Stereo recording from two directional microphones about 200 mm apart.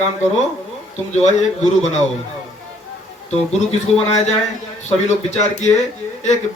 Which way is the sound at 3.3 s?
30° left (ahead or behind).